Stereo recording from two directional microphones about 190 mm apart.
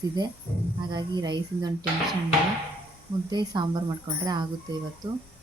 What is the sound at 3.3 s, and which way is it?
Speech, 20° right (ahead or behind).